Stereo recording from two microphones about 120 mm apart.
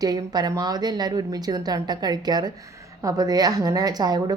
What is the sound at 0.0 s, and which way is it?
A woman's voice, 35° right (ahead or behind).